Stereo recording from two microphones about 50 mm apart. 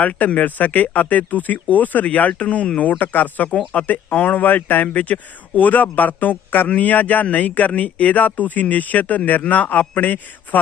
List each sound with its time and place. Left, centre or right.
0.0 s speech: left